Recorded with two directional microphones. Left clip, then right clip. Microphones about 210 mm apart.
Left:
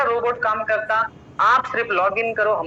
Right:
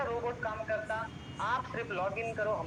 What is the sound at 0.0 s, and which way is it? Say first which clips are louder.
A man's voice: left 15 dB; 40° left (ahead or behind).